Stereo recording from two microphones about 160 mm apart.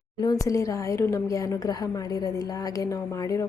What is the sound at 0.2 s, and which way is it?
A woman's voice, 25° left (ahead or behind).